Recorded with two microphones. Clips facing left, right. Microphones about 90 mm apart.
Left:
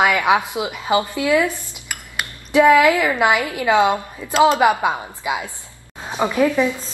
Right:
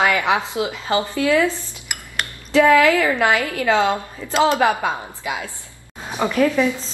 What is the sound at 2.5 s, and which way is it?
A woman's voice, 20° left (ahead or behind).